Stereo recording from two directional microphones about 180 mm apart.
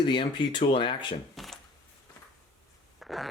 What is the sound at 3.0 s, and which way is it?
Zipper, centre (ahead or behind).